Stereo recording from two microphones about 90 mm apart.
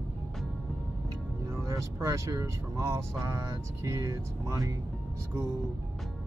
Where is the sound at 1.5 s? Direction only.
35° right (ahead or behind).